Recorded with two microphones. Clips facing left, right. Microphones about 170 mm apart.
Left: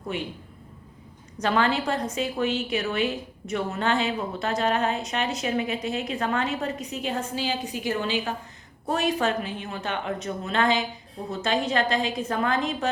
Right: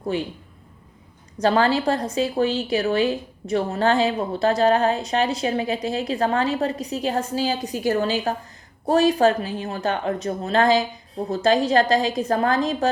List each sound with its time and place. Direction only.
0.1 s a woman's voice: 35° right (ahead or behind)
1.4 s a woman's voice: 35° right (ahead or behind)